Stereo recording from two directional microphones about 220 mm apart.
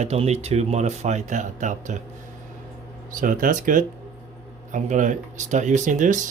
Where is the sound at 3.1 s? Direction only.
40° right (ahead or behind).